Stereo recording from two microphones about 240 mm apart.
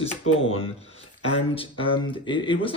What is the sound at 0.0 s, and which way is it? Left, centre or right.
Speech, left.